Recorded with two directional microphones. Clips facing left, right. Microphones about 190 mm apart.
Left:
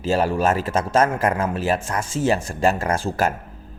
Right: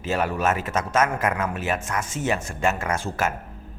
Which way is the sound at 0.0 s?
30° left (ahead or behind).